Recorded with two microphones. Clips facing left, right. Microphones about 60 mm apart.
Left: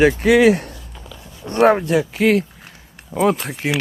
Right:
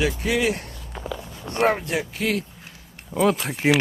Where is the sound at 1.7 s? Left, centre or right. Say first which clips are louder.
Left 8 dB; left.